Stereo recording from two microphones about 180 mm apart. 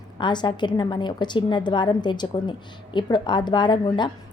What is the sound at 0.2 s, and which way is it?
A woman's voice, 25° left (ahead or behind).